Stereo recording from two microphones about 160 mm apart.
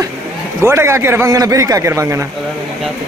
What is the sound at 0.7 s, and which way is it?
A man's voice, 15° right (ahead or behind).